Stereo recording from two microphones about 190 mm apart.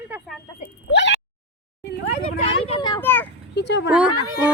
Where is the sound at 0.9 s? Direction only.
65° left (ahead or behind).